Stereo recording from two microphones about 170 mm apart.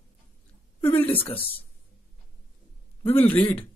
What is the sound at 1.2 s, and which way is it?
Speech, 30° left (ahead or behind).